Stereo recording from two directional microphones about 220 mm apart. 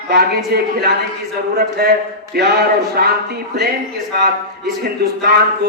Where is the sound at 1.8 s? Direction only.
45° right (ahead or behind).